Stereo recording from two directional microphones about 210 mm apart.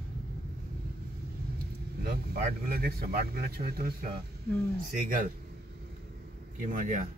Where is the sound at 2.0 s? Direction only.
45° right (ahead or behind).